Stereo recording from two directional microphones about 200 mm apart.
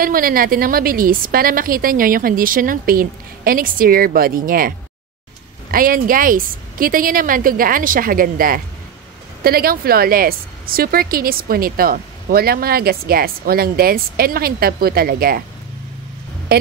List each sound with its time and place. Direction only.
0.0 s a woman's voice: 45° right (ahead or behind)